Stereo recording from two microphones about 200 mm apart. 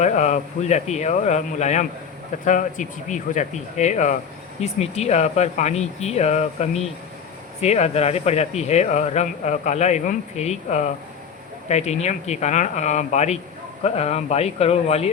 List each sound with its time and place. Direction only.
0.0 s speech: 35° left (ahead or behind)